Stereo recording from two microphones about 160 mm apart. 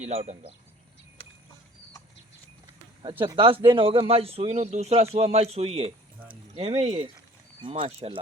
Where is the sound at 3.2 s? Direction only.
30° right (ahead or behind).